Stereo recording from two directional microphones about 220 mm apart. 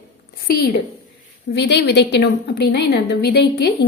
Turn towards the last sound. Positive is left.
turn(degrees=50)  # may be behind; listen again after turning